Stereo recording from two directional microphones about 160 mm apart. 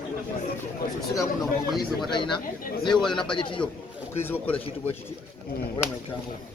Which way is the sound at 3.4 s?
30° left (ahead or behind).